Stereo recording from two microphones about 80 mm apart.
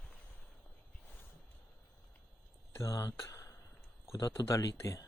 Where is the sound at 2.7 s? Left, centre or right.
Left.